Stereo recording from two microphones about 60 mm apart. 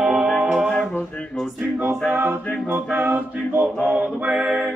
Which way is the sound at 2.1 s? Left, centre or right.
Right.